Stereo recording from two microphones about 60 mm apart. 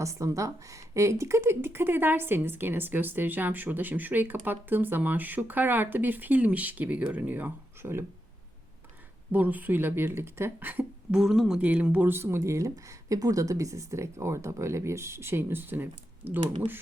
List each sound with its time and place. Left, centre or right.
0.0 s speech: right
7.8 s speech: right
9.3 s speech: right
11.1 s speech: centre
11.6 s speech: right
12.1 s speech: right
12.4 s speech: right